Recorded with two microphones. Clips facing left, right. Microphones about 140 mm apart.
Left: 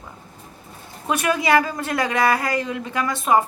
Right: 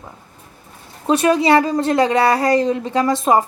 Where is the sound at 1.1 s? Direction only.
30° right (ahead or behind).